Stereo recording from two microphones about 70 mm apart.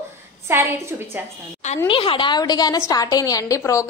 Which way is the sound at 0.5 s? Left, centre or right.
Right.